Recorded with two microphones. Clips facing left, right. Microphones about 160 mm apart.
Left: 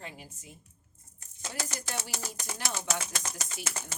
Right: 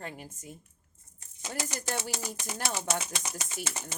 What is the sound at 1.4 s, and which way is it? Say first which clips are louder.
Speech: right 2 dB; 15° right (ahead or behind).